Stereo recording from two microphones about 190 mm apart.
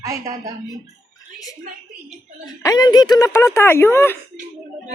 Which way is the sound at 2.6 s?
20° left (ahead or behind).